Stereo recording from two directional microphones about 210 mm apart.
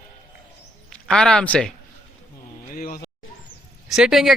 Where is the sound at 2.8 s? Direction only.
45° left (ahead or behind).